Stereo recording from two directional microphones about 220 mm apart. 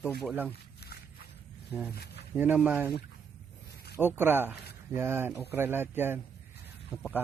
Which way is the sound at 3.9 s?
10° right (ahead or behind).